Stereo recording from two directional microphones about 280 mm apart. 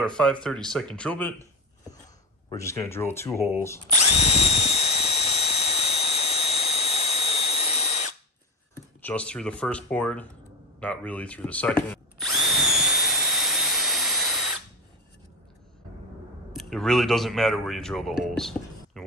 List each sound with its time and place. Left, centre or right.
0.0 s speech: centre
2.5 s speech: centre
3.9 s drill: left
9.0 s speech: centre
10.8 s drill: centre
16.5 s speech: centre
18.9 s a sound: centre